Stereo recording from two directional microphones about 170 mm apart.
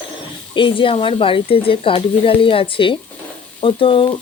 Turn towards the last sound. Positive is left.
turn(degrees=30)  # may be behind; listen again after turning